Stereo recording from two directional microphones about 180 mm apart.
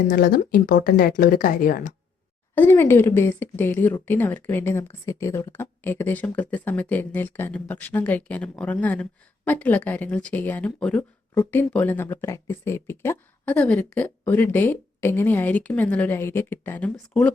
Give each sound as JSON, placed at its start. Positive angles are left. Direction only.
{"t": 0.1, "sound": "speech", "side_deg": 55}
{"t": 2.6, "sound": "speech", "side_deg": 10}